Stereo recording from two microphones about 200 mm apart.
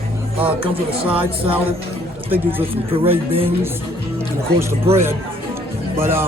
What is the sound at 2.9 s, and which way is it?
Speech, 30° right (ahead or behind).